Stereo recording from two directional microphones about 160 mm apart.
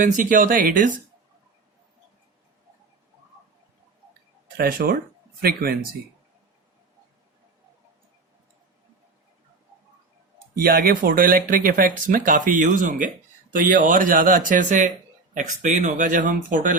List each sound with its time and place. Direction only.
0.0 s speech: 55° right (ahead or behind)
4.4 s speech: 70° right (ahead or behind)
10.5 s speech: 65° right (ahead or behind)